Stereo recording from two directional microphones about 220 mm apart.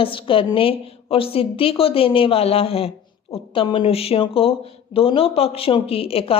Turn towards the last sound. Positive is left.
turn(degrees=25)  # may be behind; listen again after turning